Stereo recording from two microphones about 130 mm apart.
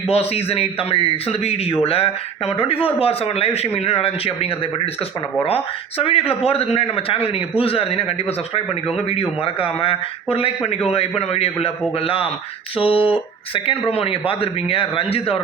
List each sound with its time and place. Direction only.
0.1 s a man's voice: 50° left (ahead or behind)
6.0 s a man's voice: 50° left (ahead or behind)